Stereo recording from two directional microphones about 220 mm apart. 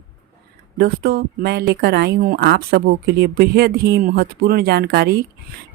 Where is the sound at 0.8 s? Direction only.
45° right (ahead or behind).